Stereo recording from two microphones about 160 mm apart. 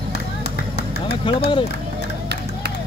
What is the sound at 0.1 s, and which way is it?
Run, 90° left.